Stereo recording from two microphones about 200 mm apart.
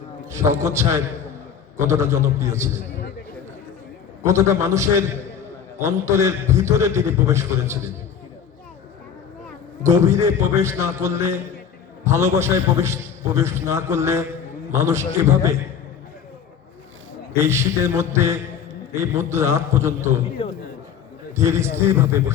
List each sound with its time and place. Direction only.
0.3 s a man's voice: 15° right (ahead or behind)
4.2 s a man's voice: 15° right (ahead or behind)
9.8 s a man's voice: 15° right (ahead or behind)
17.3 s a man's voice: 15° right (ahead or behind)
20.4 s a man's voice: 25° left (ahead or behind)
21.3 s a man's voice: 15° right (ahead or behind)